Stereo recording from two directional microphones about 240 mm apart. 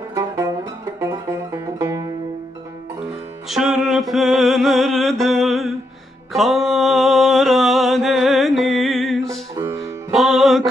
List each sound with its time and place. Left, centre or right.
0.1 s music: centre
3.4 s music: centre